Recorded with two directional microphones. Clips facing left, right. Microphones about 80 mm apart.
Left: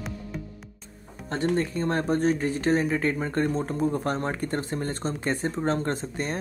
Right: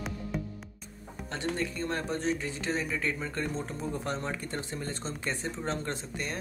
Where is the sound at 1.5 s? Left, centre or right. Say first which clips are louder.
Left 7 dB; left.